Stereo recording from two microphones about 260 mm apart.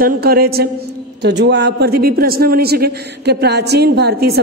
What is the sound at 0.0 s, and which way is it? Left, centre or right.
A man's voice, right.